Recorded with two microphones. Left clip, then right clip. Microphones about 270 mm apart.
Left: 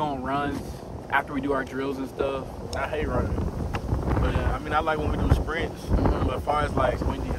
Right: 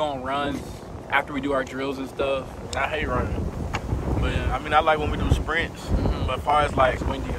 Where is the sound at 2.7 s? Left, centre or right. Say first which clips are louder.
Right 3 dB; centre.